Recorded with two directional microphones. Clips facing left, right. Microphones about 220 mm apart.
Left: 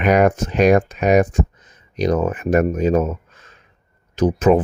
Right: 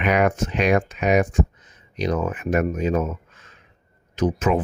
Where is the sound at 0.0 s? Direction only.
40° left (ahead or behind).